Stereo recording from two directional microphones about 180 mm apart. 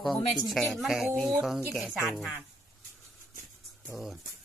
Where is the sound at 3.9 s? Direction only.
Centre (ahead or behind).